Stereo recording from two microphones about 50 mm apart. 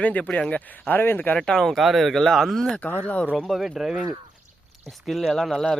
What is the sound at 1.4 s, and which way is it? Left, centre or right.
Speech, centre.